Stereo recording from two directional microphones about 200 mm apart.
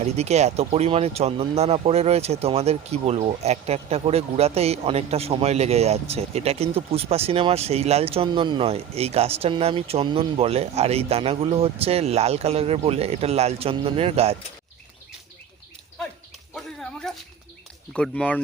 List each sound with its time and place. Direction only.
0.0 s speech: 35° right (ahead or behind)
16.6 s a sound: centre (ahead or behind)
17.9 s speech: 5° left (ahead or behind)